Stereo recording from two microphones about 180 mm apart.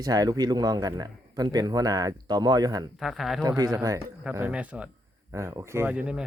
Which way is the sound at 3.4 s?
20° right (ahead or behind).